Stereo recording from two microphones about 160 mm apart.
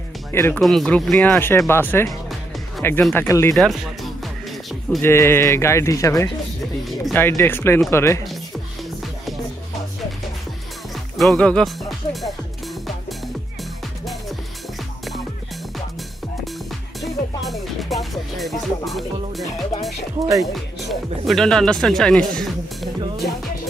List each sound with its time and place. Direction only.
0.3 s speech: 15° left (ahead or behind)
0.6 s speech: centre (ahead or behind)
3.5 s speech: centre (ahead or behind)
5.0 s speech: 15° left (ahead or behind)
11.1 s speech: 5° left (ahead or behind)
17.0 s music: centre (ahead or behind)
20.2 s speech: 20° right (ahead or behind)
20.9 s speech: centre (ahead or behind)